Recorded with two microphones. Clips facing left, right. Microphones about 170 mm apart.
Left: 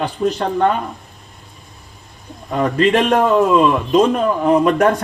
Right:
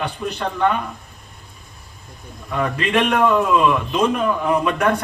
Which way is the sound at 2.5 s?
45° left (ahead or behind).